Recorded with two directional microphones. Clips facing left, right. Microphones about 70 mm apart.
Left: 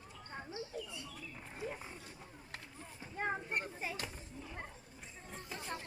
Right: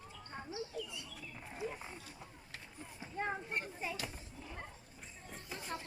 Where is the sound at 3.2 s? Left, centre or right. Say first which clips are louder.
Left 1 dB; centre.